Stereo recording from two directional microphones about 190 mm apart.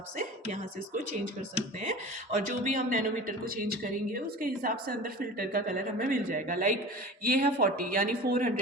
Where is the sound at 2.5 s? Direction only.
45° right (ahead or behind).